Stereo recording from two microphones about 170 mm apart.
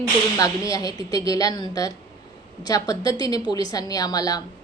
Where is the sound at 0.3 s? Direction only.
20° left (ahead or behind).